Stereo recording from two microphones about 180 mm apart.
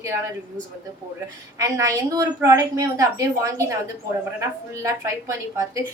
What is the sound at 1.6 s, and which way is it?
A woman's voice, 15° right (ahead or behind).